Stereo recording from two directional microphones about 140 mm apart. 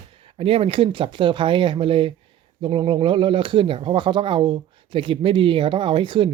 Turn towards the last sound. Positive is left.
turn(degrees=-35)  # may be behind; listen again after turning